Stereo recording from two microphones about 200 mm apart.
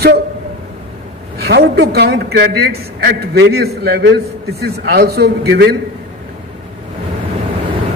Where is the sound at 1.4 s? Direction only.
50° right (ahead or behind).